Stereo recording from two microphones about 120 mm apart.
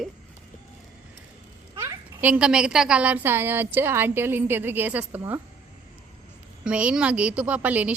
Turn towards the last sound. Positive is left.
turn(degrees=-15)  # may be behind; listen again after turning